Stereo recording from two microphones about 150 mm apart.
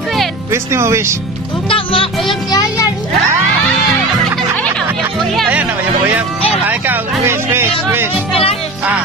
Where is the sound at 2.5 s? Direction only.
25° left (ahead or behind).